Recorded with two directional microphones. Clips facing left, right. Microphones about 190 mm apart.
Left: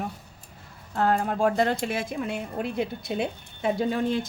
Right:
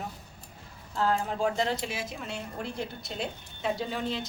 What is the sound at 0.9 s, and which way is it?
A woman's voice, 55° left (ahead or behind).